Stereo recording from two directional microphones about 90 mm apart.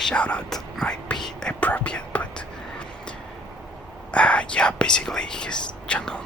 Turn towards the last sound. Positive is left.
turn(degrees=10)  # may be behind; listen again after turning